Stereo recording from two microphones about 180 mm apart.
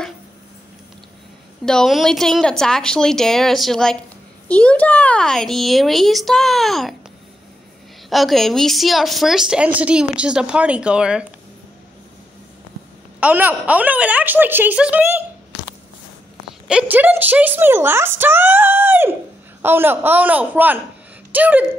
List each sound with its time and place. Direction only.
1.7 s a woman's voice: centre (ahead or behind)
8.1 s a woman's voice: centre (ahead or behind)
13.2 s speech: 10° right (ahead or behind)
16.4 s a woman's voice: 5° right (ahead or behind)